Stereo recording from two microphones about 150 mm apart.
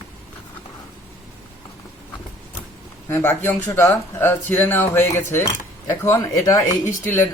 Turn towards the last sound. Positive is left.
turn(degrees=20)  # may be behind; listen again after turning